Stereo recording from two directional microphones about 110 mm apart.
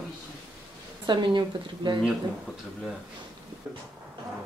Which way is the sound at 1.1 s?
45° right (ahead or behind).